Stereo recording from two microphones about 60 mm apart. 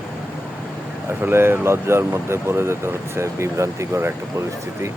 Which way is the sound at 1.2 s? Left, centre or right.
Right.